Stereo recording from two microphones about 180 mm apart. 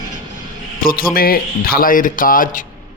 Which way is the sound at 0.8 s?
55° left (ahead or behind).